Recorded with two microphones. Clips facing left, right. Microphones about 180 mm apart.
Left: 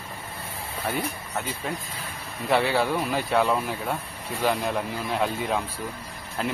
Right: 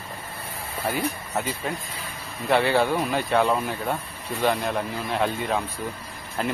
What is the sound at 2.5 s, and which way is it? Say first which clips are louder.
Speech: right 2 dB; centre (ahead or behind).